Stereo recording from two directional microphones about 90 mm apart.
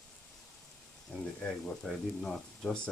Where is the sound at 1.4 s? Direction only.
5° left (ahead or behind).